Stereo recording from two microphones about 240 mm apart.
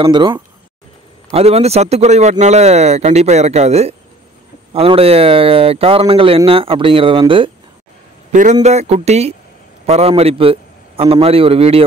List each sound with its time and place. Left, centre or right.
0.0 s speech: centre
8.3 s a man's voice: right